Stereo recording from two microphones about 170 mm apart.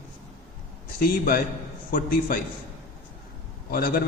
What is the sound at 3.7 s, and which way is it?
Speech, 60° left (ahead or behind).